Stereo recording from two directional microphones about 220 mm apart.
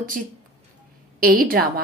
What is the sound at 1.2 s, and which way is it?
Speech, 40° right (ahead or behind).